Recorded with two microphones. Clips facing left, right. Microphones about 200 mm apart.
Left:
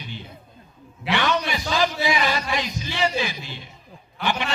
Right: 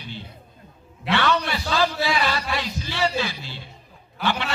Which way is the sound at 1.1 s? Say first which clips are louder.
Right 1 dB; 15° left (ahead or behind).